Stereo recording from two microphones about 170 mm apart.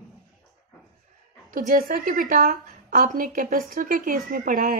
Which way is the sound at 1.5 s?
55° right (ahead or behind).